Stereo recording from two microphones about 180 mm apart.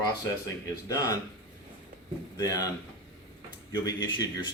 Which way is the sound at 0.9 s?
20° left (ahead or behind).